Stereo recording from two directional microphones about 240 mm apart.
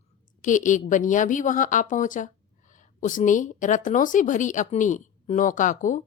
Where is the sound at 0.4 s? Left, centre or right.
Left.